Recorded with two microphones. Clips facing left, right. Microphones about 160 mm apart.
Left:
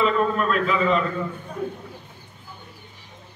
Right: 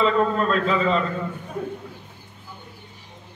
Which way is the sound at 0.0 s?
30° right (ahead or behind).